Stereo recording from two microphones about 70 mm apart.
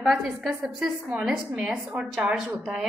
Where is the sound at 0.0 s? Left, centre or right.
Centre.